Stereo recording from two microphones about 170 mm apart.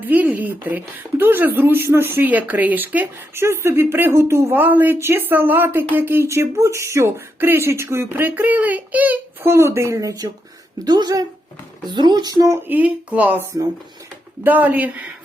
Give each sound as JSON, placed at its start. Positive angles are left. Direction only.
{"t": 0.0, "sound": "speech", "side_deg": -10}